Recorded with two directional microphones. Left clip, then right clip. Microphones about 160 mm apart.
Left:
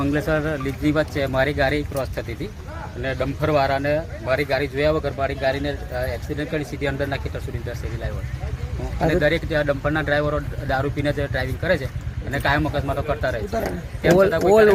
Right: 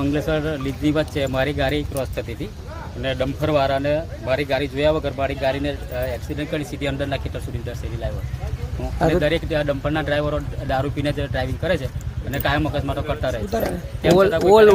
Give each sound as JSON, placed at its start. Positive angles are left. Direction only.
{"t": 0.0, "sound": "speech", "side_deg": -5}
{"t": 9.0, "sound": "speech", "side_deg": -10}